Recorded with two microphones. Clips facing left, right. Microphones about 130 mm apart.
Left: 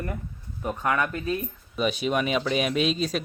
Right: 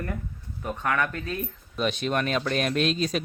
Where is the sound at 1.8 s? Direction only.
5° left (ahead or behind).